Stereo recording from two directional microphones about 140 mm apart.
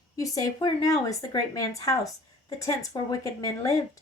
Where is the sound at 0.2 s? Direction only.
25° left (ahead or behind).